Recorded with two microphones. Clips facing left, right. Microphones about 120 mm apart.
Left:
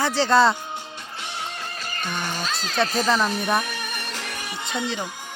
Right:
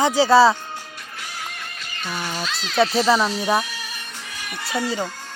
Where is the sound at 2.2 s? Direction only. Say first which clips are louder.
Right 1 dB; 45° left (ahead or behind).